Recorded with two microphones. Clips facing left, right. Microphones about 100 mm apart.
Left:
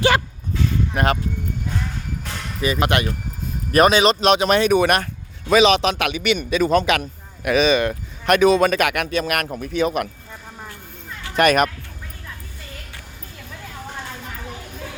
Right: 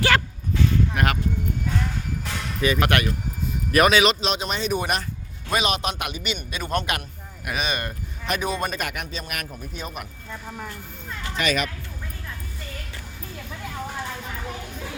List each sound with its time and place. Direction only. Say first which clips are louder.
0.9 s speech: left 4 dB; 30° left (ahead or behind)
2.2 s music: even; centre (ahead or behind)
2.6 s speech: left 2 dB; 25° left (ahead or behind)
4.2 s speech: left 10 dB; 65° left (ahead or behind)
5.5 s a man's voice: left 9 dB; 90° left; by 10.1 s 70° left (ahead or behind)
11.3 s speech: left 9 dB; 50° left (ahead or behind)